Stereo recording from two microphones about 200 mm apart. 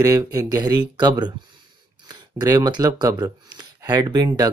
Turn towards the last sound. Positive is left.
turn(degrees=-20)  # may be behind; listen again after turning